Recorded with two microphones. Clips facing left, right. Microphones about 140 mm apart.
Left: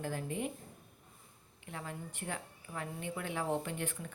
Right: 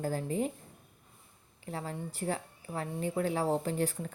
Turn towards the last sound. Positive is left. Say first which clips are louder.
# right 6 dB
turn(degrees=-35)  # may be behind; listen again after turning